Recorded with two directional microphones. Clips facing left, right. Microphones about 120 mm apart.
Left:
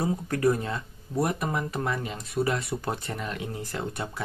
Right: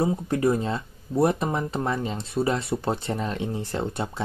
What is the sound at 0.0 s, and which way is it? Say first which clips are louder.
Speech: right 2 dB; 20° right (ahead or behind).